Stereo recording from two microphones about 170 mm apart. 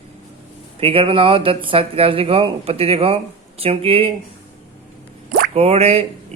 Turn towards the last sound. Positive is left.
turn(degrees=-35)  # may be behind; listen again after turning